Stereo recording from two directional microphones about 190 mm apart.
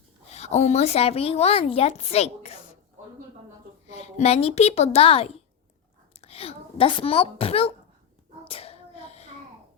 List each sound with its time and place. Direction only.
0.3 s speech: 35° left (ahead or behind)
3.9 s speech: 35° left (ahead or behind)
8.4 s hands: 30° left (ahead or behind)